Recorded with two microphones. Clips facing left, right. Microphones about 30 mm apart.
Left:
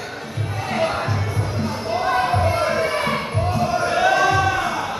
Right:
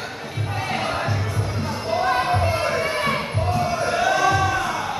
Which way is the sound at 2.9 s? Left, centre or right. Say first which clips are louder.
Left 1 dB; centre.